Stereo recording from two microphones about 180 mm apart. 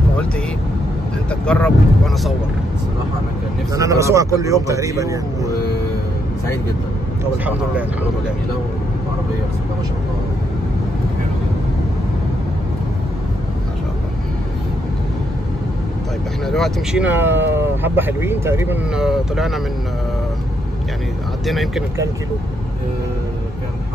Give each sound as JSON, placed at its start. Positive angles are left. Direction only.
{"t": 1.3, "sound": "speech", "side_deg": 5}
{"t": 3.7, "sound": "speech", "side_deg": -20}
{"t": 16.4, "sound": "speech", "side_deg": 0}
{"t": 18.9, "sound": "speech", "side_deg": 0}
{"t": 21.5, "sound": "speech", "side_deg": 0}